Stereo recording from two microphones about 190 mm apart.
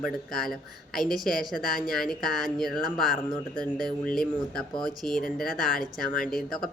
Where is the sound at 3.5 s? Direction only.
20° right (ahead or behind).